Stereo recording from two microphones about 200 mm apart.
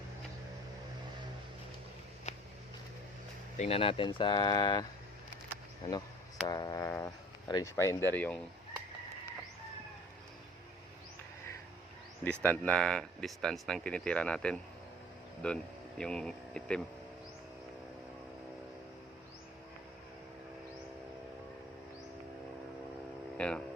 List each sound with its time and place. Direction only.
2.3 s a sound: 35° left (ahead or behind)
3.6 s speech: 30° left (ahead or behind)
6.5 s speech: 20° left (ahead or behind)
12.2 s speech: 5° left (ahead or behind)
23.4 s speech: 5° left (ahead or behind)